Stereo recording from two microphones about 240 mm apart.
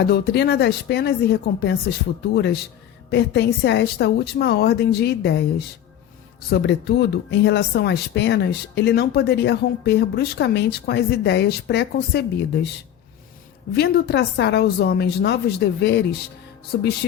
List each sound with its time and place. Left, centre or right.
0.0 s speech: left
13.7 s speech: left